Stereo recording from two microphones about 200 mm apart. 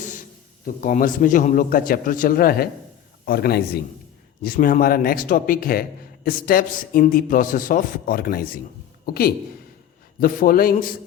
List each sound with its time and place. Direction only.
0.0 s a man's voice: 40° left (ahead or behind)